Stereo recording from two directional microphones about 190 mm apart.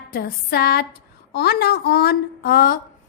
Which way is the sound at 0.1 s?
50° left (ahead or behind).